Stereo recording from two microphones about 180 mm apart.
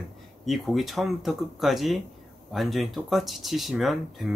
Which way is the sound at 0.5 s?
Centre (ahead or behind).